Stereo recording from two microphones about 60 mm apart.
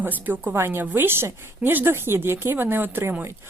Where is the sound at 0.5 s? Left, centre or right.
Right.